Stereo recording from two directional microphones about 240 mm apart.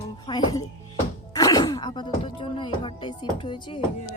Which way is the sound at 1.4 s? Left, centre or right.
Centre.